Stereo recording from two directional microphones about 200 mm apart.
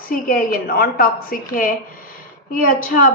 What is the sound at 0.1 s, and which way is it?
A woman's voice, 45° left (ahead or behind).